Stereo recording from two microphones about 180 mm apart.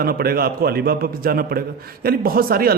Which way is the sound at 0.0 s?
55° right (ahead or behind).